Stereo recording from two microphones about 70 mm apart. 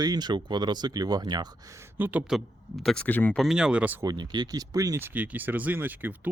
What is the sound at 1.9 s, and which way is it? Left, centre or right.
Speech, right.